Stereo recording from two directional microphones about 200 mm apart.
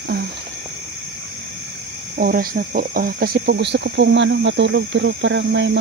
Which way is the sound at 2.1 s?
50° right (ahead or behind).